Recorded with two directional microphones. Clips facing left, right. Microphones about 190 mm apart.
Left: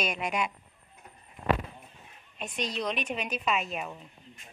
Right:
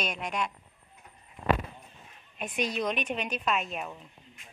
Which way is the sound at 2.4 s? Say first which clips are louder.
Right 2 dB; 5° right (ahead or behind).